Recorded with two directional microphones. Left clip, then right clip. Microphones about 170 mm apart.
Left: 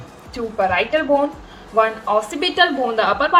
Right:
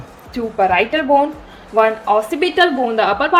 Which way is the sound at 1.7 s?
40° right (ahead or behind).